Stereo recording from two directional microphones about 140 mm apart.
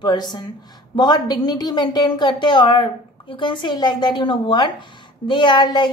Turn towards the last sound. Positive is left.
turn(degrees=35)  # may be behind; listen again after turning